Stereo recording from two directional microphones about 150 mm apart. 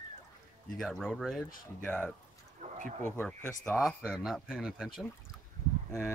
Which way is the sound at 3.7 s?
5° right (ahead or behind).